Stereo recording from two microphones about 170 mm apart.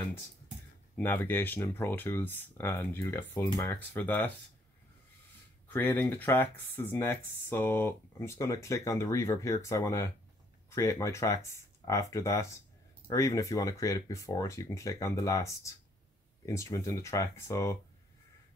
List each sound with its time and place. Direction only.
0.9 s speech: 10° left (ahead or behind)
5.7 s speech: 10° left (ahead or behind)